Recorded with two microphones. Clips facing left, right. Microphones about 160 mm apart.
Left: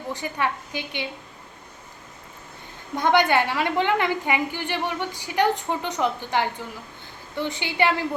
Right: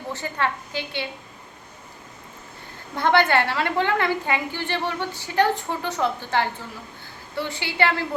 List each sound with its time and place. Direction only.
0.1 s a woman's voice: 15° left (ahead or behind)
2.9 s a woman's voice: 15° left (ahead or behind)